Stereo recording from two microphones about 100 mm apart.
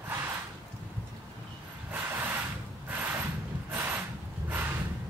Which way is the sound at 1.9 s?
20° right (ahead or behind).